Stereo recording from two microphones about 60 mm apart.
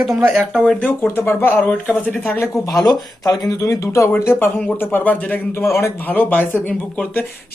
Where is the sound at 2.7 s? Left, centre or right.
Left.